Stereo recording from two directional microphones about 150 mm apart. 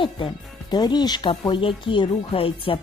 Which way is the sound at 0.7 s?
30° left (ahead or behind).